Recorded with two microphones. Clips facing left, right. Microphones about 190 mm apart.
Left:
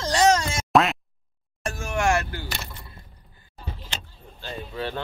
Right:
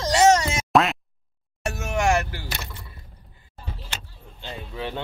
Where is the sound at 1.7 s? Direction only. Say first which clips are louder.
Right 1 dB; 20° right (ahead or behind).